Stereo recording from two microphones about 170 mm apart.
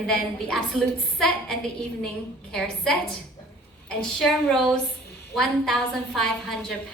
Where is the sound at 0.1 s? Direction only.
Centre (ahead or behind).